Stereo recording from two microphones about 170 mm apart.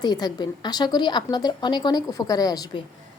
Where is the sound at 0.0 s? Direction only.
25° left (ahead or behind).